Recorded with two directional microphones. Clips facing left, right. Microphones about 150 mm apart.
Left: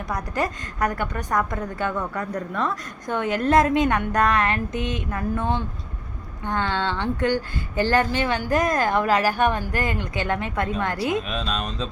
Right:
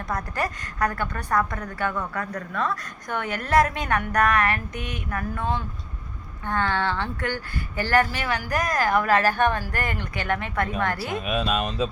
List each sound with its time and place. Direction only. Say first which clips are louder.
0.1 s a woman's voice: left 2 dB; 15° left (ahead or behind)
11.2 s speech: right 3 dB; 10° right (ahead or behind)